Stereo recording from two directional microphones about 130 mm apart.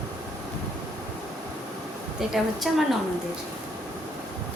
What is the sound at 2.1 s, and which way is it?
Speech, centre (ahead or behind).